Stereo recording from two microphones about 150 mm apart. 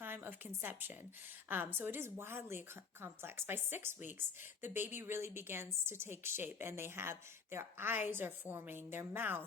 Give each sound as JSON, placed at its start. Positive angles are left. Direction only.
{"t": 0.0, "sound": "a woman's voice", "side_deg": -15}